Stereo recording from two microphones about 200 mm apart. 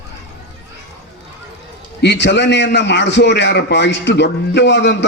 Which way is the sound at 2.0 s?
60° left (ahead or behind).